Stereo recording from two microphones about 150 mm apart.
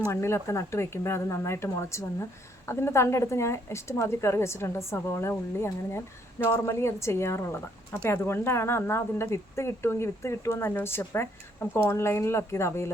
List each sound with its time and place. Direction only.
0.1 s a woman's voice: 15° left (ahead or behind)